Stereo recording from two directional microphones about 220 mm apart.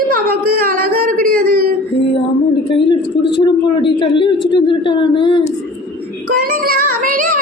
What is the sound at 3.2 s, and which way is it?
Speech, 50° left (ahead or behind).